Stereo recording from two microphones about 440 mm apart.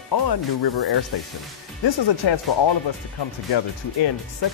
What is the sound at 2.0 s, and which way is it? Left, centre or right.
Speech, left.